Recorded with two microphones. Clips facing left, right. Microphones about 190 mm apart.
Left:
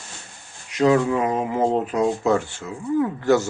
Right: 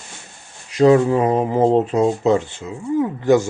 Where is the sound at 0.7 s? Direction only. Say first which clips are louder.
Right 5 dB; 30° right (ahead or behind).